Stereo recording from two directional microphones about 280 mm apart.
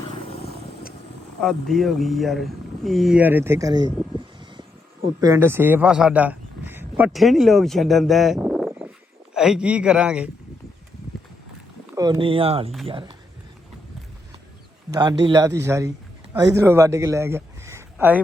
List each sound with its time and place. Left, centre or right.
1.4 s speech: centre
5.2 s a man's voice: centre
11.9 s speech: centre
15.2 s speech: centre